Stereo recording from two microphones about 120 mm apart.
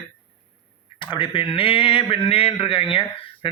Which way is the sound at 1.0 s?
40° left (ahead or behind).